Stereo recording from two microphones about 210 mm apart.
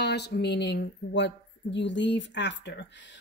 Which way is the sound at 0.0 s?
55° left (ahead or behind).